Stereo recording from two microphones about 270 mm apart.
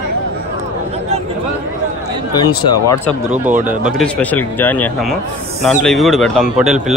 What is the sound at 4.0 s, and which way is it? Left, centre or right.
A man's voice, centre.